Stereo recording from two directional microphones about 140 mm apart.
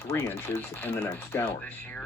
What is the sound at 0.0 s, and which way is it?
Speech, 15° left (ahead or behind).